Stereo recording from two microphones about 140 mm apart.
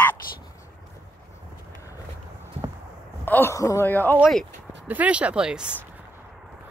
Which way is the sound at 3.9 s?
15° left (ahead or behind).